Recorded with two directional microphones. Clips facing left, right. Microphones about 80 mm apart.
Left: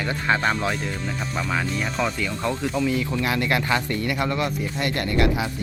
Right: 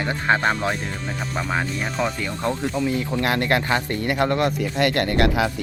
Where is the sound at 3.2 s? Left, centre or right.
Right.